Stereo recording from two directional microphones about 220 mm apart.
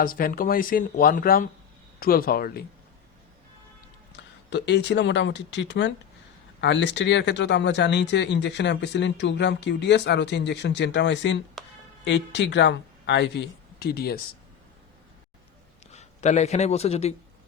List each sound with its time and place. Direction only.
0.0 s speech: 40° left (ahead or behind)
4.1 s speech: 50° left (ahead or behind)
15.9 s a man's voice: 30° left (ahead or behind)